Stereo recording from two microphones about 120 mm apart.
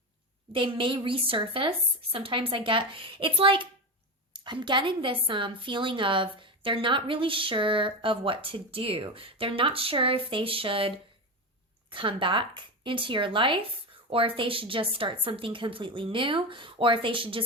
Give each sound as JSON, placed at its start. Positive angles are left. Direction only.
{"t": 0.5, "sound": "a woman's voice", "side_deg": -45}